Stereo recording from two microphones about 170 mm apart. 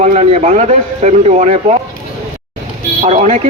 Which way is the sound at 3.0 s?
40° right (ahead or behind).